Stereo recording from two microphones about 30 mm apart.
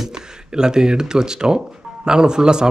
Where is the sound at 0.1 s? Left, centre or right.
Right.